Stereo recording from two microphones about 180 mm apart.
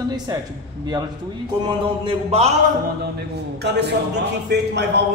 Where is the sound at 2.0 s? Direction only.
35° right (ahead or behind).